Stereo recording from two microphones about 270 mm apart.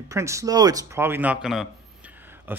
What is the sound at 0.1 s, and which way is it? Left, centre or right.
Speech, centre.